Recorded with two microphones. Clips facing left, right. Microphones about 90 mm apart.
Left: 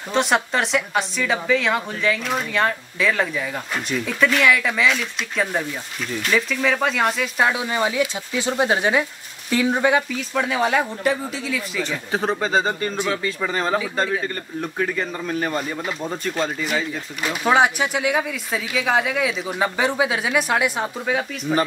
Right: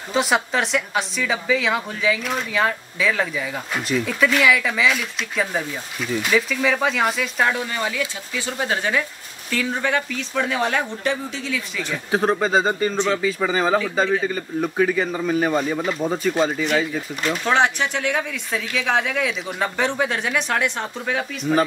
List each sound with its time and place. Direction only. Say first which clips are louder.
0.1 s speech: even; centre (ahead or behind)
7.6 s speech: left 4 dB; 20° left (ahead or behind); by 12.9 s 5° right (ahead or behind)
12.9 s speech: right 3 dB; 10° left (ahead or behind)
13.2 s speech: right 3 dB; 5° right (ahead or behind)